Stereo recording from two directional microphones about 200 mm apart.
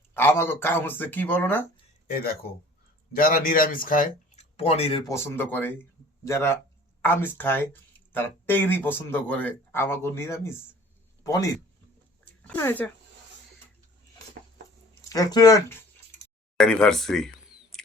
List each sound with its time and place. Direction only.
0.1 s speech: 10° left (ahead or behind)
2.0 s speech: 50° left (ahead or behind)
4.5 s speech: 30° left (ahead or behind)
5.0 s a man's voice: 10° left (ahead or behind)
12.2 s a sound: 10° left (ahead or behind)
15.1 s speech: 15° left (ahead or behind)
16.6 s a sound: 5° left (ahead or behind)